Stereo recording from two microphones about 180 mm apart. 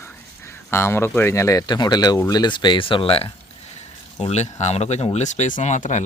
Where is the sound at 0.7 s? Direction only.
15° left (ahead or behind).